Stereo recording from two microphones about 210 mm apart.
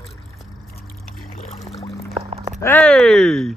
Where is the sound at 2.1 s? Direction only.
30° right (ahead or behind).